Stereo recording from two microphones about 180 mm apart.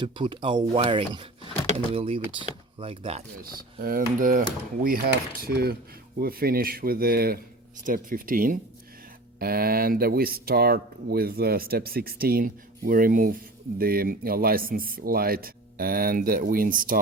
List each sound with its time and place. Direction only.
0.0 s speech: 25° right (ahead or behind)
3.4 s speech: 55° right (ahead or behind)